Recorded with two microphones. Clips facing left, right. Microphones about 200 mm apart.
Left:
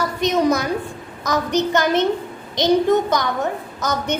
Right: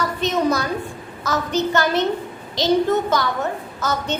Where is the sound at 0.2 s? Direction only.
15° left (ahead or behind).